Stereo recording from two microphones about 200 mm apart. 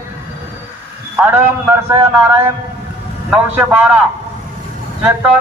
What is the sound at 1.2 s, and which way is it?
A man's voice, 10° right (ahead or behind).